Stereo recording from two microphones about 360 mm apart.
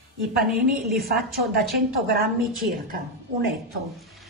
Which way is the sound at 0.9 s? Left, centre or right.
Right.